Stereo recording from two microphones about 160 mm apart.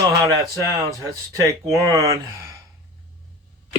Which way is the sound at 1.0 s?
20° right (ahead or behind).